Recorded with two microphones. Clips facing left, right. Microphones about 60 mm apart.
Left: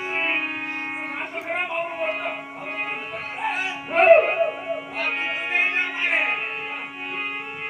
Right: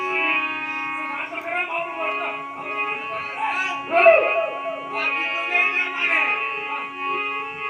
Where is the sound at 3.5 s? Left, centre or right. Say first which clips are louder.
Right 2 dB; right.